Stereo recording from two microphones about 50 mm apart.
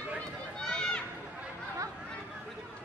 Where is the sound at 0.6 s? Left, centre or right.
Centre.